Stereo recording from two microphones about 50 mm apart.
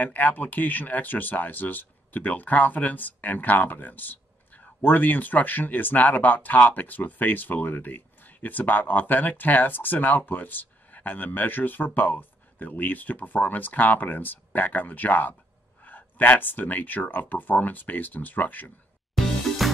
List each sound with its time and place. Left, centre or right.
0.0 s speech: left
19.1 s music: centre